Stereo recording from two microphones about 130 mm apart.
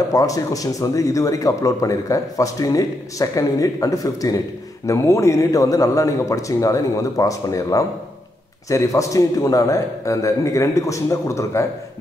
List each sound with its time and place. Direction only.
0.1 s speech: 25° left (ahead or behind)